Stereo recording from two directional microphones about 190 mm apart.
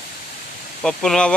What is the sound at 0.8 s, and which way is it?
Speech, 5° left (ahead or behind).